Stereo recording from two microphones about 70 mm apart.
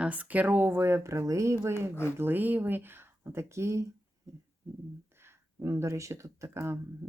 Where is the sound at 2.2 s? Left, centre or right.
Right.